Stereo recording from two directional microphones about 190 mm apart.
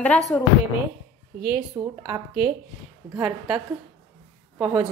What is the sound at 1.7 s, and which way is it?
Speech, 25° right (ahead or behind).